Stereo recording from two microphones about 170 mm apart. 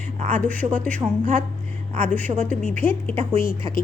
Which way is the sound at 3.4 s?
55° left (ahead or behind).